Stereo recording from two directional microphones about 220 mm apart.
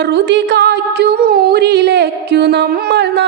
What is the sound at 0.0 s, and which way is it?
Music, 50° right (ahead or behind).